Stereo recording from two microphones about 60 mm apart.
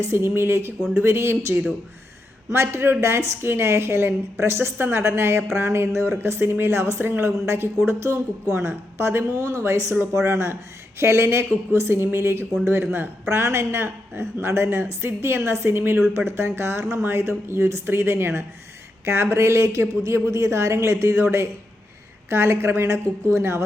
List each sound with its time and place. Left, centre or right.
0.0 s a woman's voice: right
9.3 s speech: right
10.2 s a woman's voice: right
13.2 s a woman's voice: right
22.3 s a woman's voice: right